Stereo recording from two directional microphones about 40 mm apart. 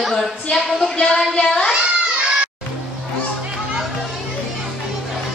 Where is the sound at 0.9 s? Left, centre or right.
Left.